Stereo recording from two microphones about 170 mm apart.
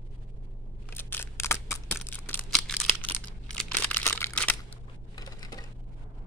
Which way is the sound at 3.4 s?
10° left (ahead or behind).